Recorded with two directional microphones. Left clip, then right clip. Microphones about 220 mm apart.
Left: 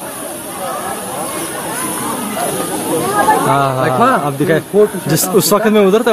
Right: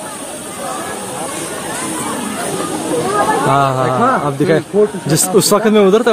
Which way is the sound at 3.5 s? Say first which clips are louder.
Even; 10° right (ahead or behind).